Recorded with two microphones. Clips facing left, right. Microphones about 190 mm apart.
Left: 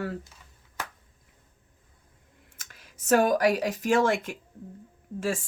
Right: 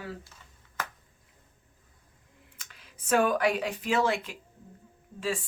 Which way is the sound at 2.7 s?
45° left (ahead or behind).